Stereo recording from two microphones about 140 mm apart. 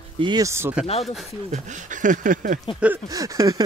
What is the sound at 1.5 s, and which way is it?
Speech, 65° right (ahead or behind).